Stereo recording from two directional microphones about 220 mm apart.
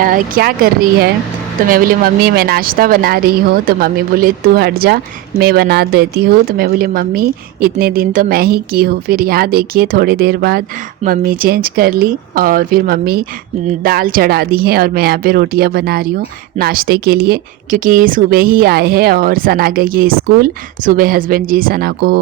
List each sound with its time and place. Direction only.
0.0 s a woman's voice: 40° right (ahead or behind)